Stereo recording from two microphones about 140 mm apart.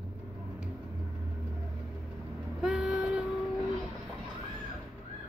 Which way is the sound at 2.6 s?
5° right (ahead or behind).